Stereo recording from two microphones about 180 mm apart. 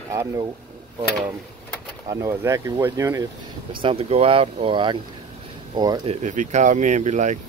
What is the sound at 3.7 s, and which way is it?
Speech, 30° right (ahead or behind).